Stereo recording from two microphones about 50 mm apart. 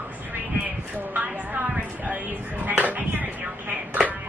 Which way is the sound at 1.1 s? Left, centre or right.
Right.